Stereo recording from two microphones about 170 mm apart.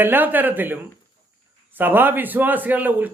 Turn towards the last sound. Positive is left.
turn(degrees=-10)  # may be behind; listen again after turning